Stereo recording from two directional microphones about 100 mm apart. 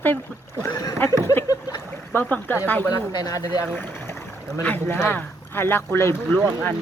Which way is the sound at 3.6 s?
20° left (ahead or behind).